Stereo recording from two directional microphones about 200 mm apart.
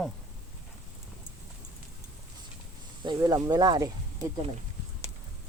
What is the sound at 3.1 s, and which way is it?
Speech, 20° right (ahead or behind).